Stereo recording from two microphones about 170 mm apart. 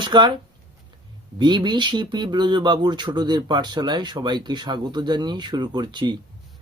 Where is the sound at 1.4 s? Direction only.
25° right (ahead or behind).